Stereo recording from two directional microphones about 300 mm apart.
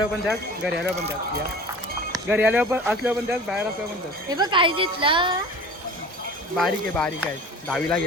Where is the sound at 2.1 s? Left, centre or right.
Centre.